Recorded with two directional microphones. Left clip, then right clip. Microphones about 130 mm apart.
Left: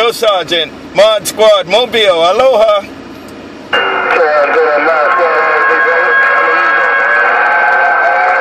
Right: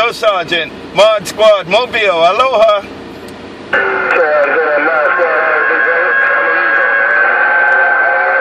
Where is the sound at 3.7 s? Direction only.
70° left (ahead or behind).